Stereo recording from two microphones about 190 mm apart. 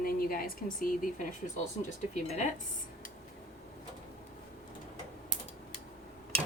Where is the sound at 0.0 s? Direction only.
50° left (ahead or behind).